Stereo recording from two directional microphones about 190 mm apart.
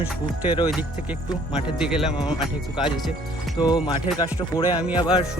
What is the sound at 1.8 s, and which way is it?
Speech, 5° right (ahead or behind).